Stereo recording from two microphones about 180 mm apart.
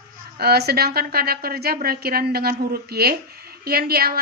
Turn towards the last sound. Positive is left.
turn(degrees=-60)  # may be behind; listen again after turning